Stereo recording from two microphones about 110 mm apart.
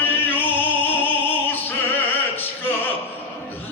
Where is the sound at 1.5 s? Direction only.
15° left (ahead or behind).